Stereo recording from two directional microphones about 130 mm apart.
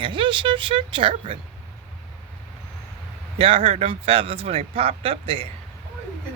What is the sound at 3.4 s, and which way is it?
Speech, 45° right (ahead or behind).